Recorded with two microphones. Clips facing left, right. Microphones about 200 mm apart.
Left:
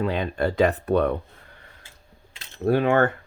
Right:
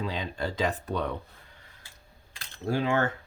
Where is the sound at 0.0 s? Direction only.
60° left (ahead or behind).